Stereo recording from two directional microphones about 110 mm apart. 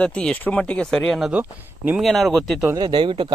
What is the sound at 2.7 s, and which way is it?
Speech, 45° right (ahead or behind).